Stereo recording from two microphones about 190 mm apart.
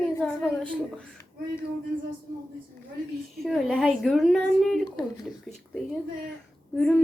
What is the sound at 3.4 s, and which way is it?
Speech, centre (ahead or behind).